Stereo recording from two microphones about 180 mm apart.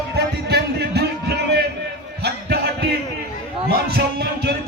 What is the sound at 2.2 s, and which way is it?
Music, 60° right (ahead or behind).